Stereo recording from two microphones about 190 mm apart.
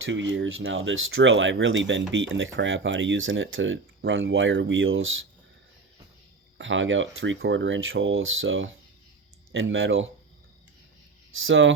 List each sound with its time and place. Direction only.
0.0 s speech: 70° right (ahead or behind); by 5.2 s 90° right
6.6 s speech: 90° right
11.3 s speech: 85° right